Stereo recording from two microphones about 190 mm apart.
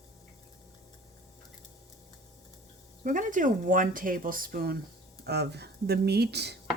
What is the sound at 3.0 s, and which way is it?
Speech, 40° right (ahead or behind).